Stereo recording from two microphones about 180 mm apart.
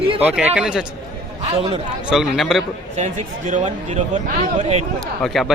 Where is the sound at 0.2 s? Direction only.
10° right (ahead or behind).